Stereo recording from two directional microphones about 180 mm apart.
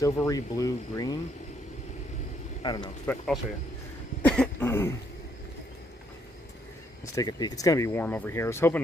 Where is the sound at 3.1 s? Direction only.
10° left (ahead or behind).